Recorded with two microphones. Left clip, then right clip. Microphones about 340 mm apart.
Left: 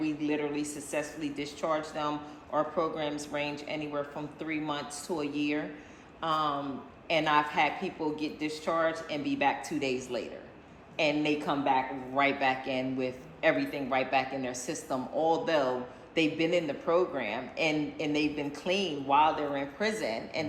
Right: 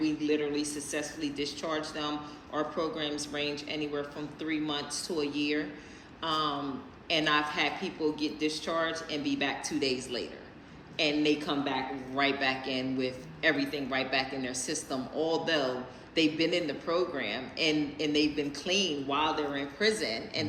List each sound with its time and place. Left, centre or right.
0.0 s speech: centre